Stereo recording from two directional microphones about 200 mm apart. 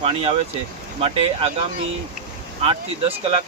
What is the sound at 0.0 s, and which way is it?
Speech, 30° right (ahead or behind).